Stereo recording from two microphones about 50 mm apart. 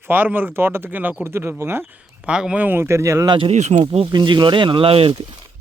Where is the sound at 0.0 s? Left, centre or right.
Right.